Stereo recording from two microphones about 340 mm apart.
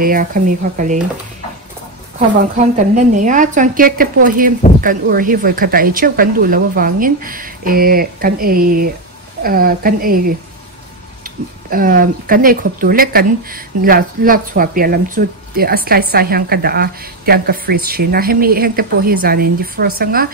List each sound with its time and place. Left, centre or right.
0.0 s speech: right
2.9 s speech: right